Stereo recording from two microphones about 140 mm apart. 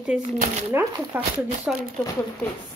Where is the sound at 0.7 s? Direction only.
20° right (ahead or behind).